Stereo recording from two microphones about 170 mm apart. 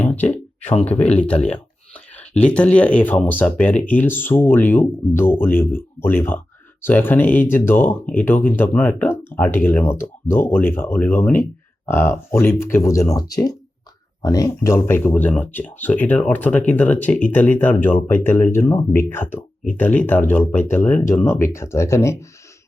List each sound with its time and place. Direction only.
0.0 s speech: 10° left (ahead or behind)
0.6 s speech: 40° left (ahead or behind)
1.5 s speech: 10° left (ahead or behind)